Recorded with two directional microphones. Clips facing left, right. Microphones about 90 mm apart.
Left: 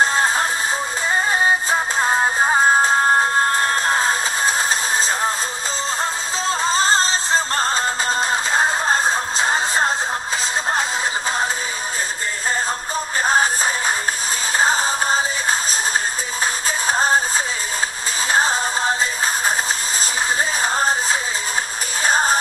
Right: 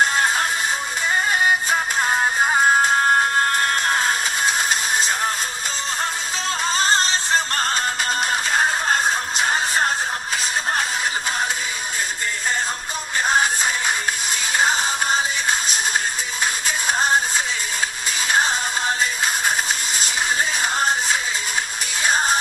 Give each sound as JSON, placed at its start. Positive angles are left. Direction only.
{"t": 0.0, "sound": "music", "side_deg": 30}
{"t": 6.4, "sound": "music", "side_deg": 30}
{"t": 13.2, "sound": "music", "side_deg": 35}
{"t": 16.6, "sound": "music", "side_deg": 35}
{"t": 18.3, "sound": "music", "side_deg": 35}
{"t": 20.6, "sound": "a sound", "side_deg": 35}
{"t": 22.0, "sound": "music", "side_deg": 35}